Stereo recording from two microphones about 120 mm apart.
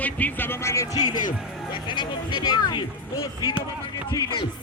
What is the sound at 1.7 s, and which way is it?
Speech, 40° left (ahead or behind).